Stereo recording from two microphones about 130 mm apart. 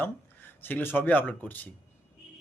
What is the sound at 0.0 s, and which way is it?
Speech, 15° left (ahead or behind).